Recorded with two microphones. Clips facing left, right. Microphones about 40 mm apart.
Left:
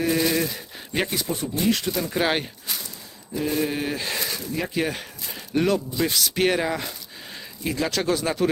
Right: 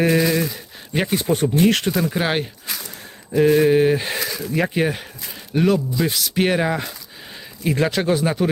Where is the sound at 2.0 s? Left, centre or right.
Centre.